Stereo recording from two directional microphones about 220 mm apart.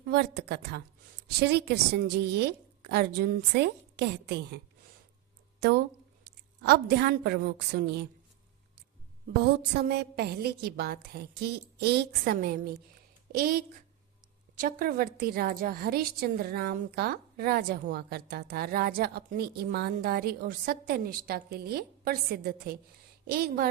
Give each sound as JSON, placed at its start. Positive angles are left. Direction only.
{"t": 0.1, "sound": "a woman's voice", "side_deg": -50}
{"t": 9.4, "sound": "a woman's voice", "side_deg": -45}
{"t": 14.8, "sound": "a woman's voice", "side_deg": -40}